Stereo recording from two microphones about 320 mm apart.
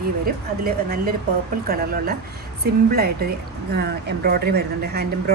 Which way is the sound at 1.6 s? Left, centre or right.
Right.